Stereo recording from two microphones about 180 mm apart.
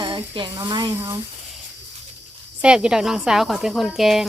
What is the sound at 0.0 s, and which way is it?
Speech, 25° right (ahead or behind).